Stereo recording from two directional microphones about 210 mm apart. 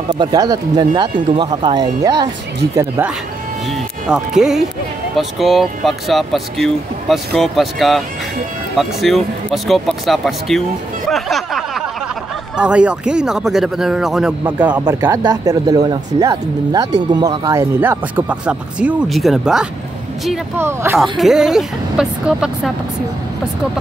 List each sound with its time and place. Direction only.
0.1 s speech: 20° right (ahead or behind)
4.4 s speech: centre (ahead or behind)
11.1 s music: centre (ahead or behind)
12.5 s speech: 5° right (ahead or behind)